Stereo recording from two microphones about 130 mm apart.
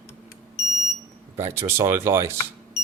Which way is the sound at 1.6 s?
20° right (ahead or behind).